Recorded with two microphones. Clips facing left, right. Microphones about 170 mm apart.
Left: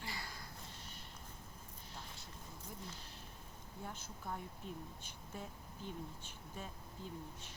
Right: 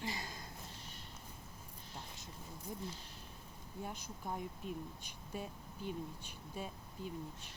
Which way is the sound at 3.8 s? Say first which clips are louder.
Right 2 dB; 15° right (ahead or behind).